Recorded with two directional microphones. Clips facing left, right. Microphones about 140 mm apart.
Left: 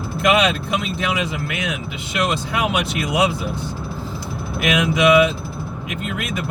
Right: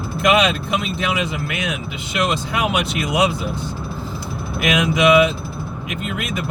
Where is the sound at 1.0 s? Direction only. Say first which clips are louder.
Right 1 dB; 20° right (ahead or behind).